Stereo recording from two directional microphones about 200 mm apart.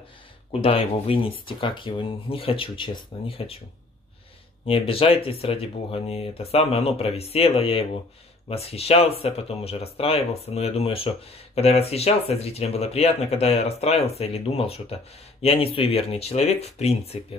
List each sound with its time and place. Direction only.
0.5 s speech: 30° left (ahead or behind)
4.6 s speech: 30° left (ahead or behind)